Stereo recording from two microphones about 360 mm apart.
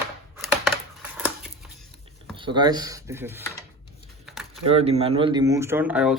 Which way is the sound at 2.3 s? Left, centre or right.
Centre.